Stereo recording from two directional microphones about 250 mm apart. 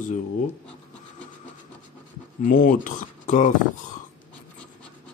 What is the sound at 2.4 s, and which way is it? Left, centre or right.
Speech, left.